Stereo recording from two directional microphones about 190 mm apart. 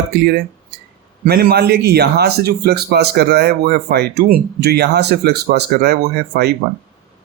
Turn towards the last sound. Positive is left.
turn(degrees=-60)  # may be behind; listen again after turning